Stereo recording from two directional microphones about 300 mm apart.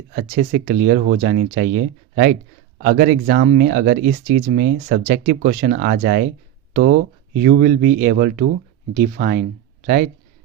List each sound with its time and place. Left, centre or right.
0.2 s speech: right